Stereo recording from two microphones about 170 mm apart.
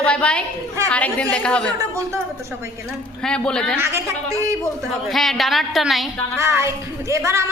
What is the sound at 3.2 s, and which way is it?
Speech, 5° left (ahead or behind).